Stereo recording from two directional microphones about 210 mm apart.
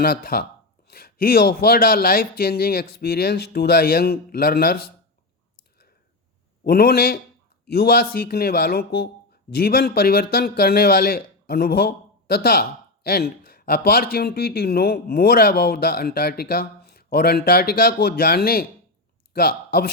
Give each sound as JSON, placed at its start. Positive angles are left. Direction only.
{"t": 0.0, "sound": "a man's voice", "side_deg": 45}
{"t": 6.7, "sound": "a man's voice", "side_deg": 50}